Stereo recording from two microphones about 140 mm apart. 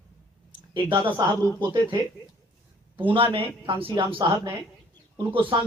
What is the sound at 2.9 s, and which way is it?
Speech, 40° right (ahead or behind).